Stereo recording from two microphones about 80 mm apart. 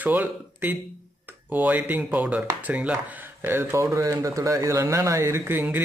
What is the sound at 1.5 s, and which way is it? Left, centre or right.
Speech, centre.